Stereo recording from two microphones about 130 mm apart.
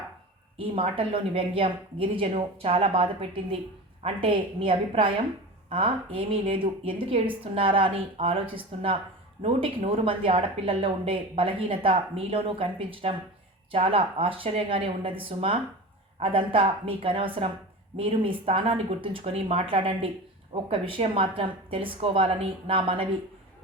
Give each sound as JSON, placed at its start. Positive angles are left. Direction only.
{"t": 0.6, "sound": "speech", "side_deg": -45}